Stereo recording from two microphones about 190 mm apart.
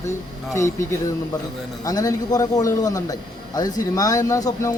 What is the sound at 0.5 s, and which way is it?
A man's voice, 15° left (ahead or behind).